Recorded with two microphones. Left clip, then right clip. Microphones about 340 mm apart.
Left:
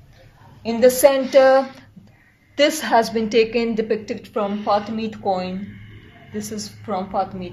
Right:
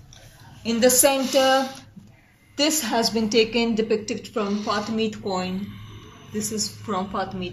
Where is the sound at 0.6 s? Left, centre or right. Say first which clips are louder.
Left 5 dB; centre.